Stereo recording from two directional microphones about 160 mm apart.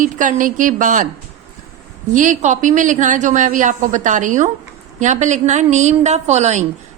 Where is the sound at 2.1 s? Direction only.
50° right (ahead or behind).